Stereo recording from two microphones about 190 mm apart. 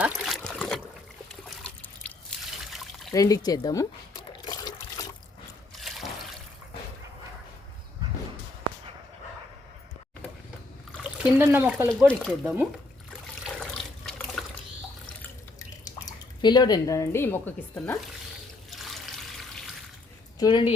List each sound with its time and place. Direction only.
0.2 s trickle: centre (ahead or behind)
2.0 s drip: 5° left (ahead or behind)
2.7 s a sound: centre (ahead or behind)
3.2 s liquid: 20° left (ahead or behind)
5.7 s trickle: centre (ahead or behind)
10.9 s speech: 5° right (ahead or behind)
11.9 s speech: 5° left (ahead or behind)
13.4 s toilet flush: centre (ahead or behind)
16.0 s speech: 20° left (ahead or behind)
18.7 s trickle: centre (ahead or behind)
20.4 s speech: 25° left (ahead or behind)